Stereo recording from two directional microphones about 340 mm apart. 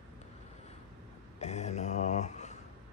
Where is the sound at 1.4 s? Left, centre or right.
Centre.